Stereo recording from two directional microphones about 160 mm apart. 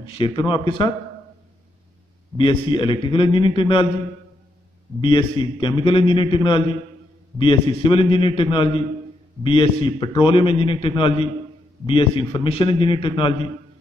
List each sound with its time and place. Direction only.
0.0 s a man's voice: 35° left (ahead or behind)
2.3 s a man's voice: 30° left (ahead or behind)
5.0 s a man's voice: 30° left (ahead or behind)